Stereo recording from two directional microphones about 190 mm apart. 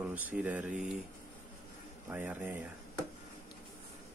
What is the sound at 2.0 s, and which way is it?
Speech, 10° right (ahead or behind).